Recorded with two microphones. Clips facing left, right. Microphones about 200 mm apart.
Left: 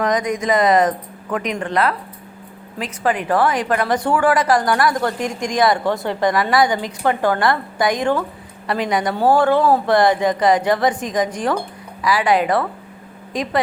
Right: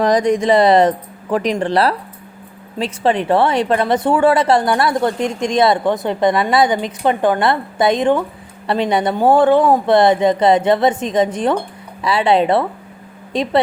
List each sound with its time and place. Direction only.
0.0 s speech: 30° right (ahead or behind)